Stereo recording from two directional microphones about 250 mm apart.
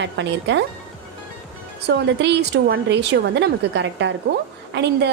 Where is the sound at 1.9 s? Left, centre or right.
Right.